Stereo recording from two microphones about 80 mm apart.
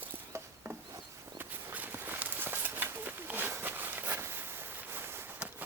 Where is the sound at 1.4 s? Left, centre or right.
Right.